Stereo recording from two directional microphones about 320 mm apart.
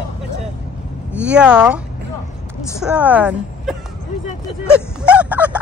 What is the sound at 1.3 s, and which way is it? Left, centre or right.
Speech, centre.